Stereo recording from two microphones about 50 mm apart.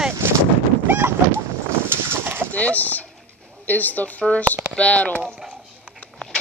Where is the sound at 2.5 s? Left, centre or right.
Left.